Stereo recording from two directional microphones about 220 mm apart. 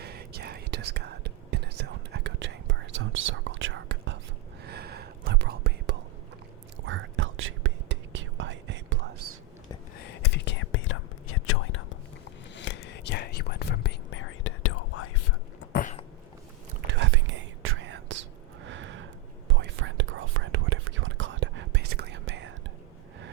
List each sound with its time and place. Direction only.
0.0 s whispering: 45° right (ahead or behind)
10.3 s whispering: 55° left (ahead or behind)
12.5 s whispering: 55° left (ahead or behind); by 15.1 s 75° left (ahead or behind)
15.7 s a sound: 35° left (ahead or behind)
16.8 s whispering: 55° right (ahead or behind)
18.7 s a sound: 55° right (ahead or behind)
19.5 s whispering: 55° right (ahead or behind)